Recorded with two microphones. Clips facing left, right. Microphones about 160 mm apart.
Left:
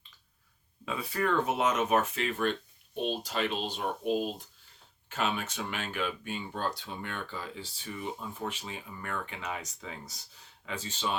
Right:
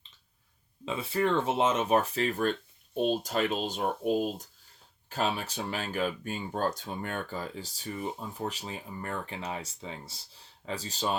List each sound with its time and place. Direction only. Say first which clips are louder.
0.9 s speech: right 2 dB; 25° right (ahead or behind)